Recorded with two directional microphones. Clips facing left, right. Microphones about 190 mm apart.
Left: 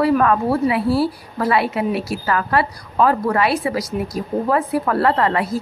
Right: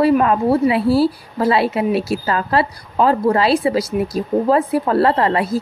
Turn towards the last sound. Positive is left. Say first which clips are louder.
# right 2 dB
turn(degrees=-25)  # may be behind; listen again after turning